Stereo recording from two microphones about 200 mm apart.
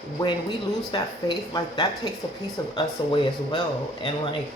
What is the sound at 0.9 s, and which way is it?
Speech, 20° left (ahead or behind).